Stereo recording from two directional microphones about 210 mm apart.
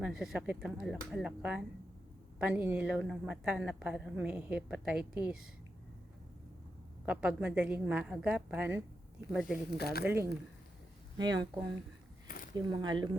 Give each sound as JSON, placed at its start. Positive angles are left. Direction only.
{"t": 0.0, "sound": "a woman's voice", "side_deg": 0}
{"t": 7.0, "sound": "a woman's voice", "side_deg": -5}
{"t": 9.6, "sound": "speech", "side_deg": 50}
{"t": 11.2, "sound": "speech", "side_deg": -20}